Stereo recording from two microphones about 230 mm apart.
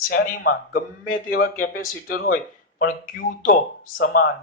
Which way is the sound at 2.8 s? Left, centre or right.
Left.